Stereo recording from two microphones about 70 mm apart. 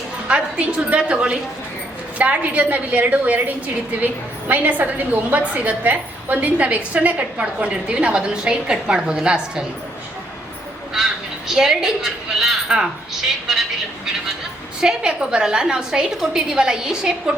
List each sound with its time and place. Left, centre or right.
0.3 s a woman's voice: centre
10.9 s crow: centre
11.5 s a woman's voice: centre